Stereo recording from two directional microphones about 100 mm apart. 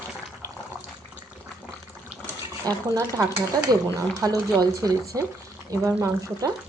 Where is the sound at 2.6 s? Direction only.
35° right (ahead or behind).